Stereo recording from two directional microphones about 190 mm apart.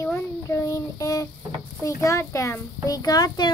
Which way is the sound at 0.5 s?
15° left (ahead or behind).